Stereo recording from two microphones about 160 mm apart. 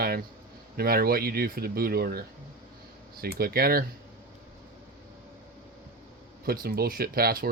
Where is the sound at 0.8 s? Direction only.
70° right (ahead or behind).